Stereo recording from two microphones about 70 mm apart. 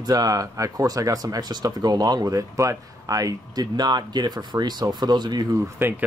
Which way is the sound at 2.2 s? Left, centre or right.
Right.